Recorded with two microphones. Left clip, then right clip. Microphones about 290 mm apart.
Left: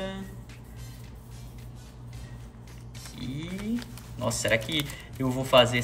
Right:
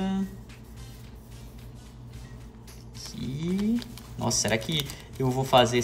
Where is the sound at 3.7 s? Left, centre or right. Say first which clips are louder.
Right 1 dB; centre.